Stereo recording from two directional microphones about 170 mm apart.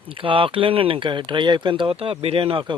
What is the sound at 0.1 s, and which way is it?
Speech, 30° right (ahead or behind).